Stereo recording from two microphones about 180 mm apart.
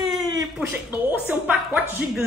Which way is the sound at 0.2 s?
20° right (ahead or behind).